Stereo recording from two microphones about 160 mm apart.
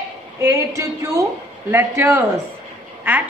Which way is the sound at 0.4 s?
20° right (ahead or behind).